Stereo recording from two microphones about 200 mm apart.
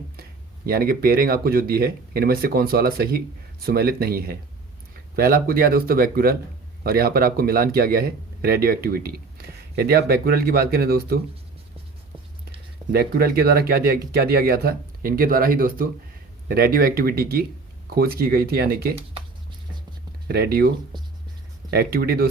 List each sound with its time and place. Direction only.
0.2 s speech: 50° right (ahead or behind)
12.9 s speech: 50° right (ahead or behind)
20.2 s speech: 50° right (ahead or behind)